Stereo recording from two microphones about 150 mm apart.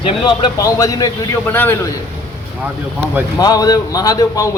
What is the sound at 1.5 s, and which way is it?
Speech, 15° left (ahead or behind).